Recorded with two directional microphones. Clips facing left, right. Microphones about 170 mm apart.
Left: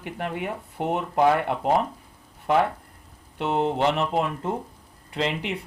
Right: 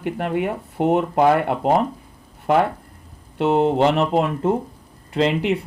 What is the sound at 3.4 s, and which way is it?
Speech, 65° right (ahead or behind).